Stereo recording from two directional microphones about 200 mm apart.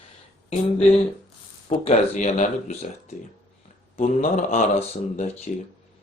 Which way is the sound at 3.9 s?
40° left (ahead or behind).